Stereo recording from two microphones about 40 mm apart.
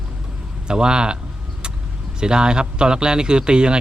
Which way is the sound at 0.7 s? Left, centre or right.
Right.